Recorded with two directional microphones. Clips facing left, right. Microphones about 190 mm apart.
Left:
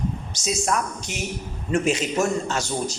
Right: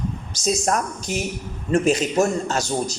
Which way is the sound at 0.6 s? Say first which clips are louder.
Right 2 dB; 40° right (ahead or behind).